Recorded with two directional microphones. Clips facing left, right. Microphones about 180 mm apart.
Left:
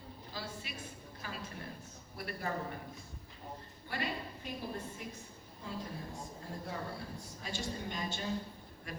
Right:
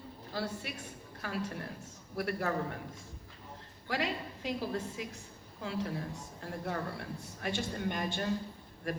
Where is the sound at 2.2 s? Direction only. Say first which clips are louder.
Right 6 dB; 75° right (ahead or behind).